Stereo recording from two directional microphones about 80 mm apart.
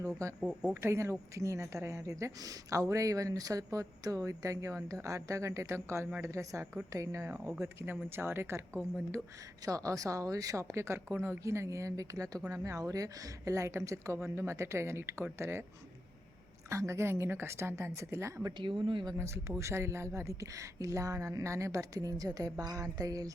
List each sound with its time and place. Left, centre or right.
0.2 s a woman's voice: right
9.6 s a woman's voice: right
16.6 s a woman's voice: right
18.5 s speech: right
19.1 s speech: right